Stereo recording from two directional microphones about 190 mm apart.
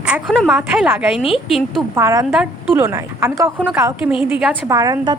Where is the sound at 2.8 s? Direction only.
15° right (ahead or behind).